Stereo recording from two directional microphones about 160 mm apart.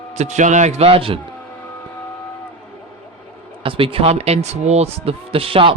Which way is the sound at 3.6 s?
35° right (ahead or behind).